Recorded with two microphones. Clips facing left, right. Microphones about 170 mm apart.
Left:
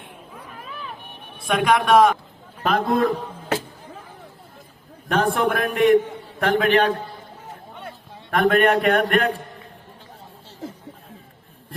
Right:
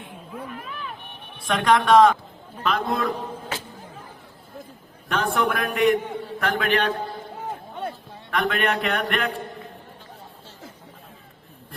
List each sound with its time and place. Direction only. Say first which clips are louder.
1.5 s a man's voice: even; 10° left (ahead or behind)
2.6 s a man's voice: left 5 dB; 45° left (ahead or behind)
5.0 s a man's voice: left 3 dB; 40° left (ahead or behind)
8.3 s a man's voice: left 6 dB; 45° left (ahead or behind)